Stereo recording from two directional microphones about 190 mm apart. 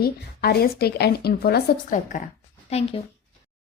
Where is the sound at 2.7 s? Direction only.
30° left (ahead or behind).